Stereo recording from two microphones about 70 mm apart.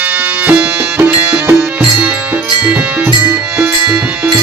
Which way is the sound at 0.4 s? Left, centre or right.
Right.